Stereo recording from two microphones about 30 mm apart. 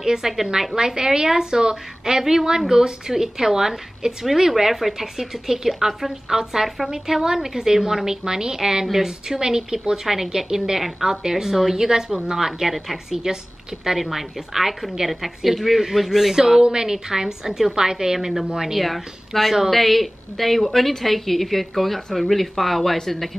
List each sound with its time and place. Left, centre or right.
0.0 s a woman's voice: centre
0.7 s a woman's voice: right
13.8 s a woman's voice: centre
18.8 s a woman's voice: centre